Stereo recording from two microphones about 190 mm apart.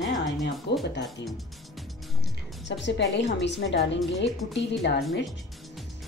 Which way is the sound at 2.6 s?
70° left (ahead or behind).